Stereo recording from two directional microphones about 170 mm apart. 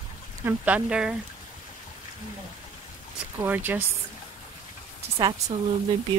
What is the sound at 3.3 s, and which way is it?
Speech, 10° right (ahead or behind).